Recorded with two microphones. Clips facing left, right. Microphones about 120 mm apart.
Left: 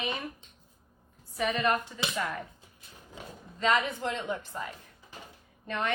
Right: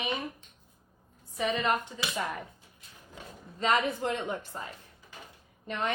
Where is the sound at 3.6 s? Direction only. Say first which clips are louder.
Even; 25° right (ahead or behind).